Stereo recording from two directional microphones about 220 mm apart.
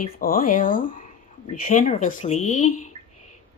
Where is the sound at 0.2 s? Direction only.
40° left (ahead or behind).